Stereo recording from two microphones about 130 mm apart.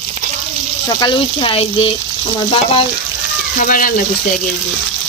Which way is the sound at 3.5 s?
90° left.